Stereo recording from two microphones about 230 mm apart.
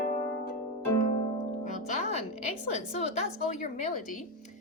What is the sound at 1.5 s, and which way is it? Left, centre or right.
Music, left.